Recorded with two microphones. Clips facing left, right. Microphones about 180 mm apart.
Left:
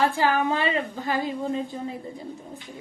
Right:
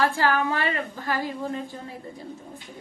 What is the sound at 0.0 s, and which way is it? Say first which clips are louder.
A woman's voice: left 1 dB; 20° left (ahead or behind).